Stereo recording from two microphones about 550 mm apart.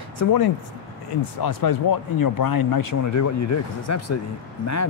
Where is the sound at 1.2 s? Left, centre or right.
Left.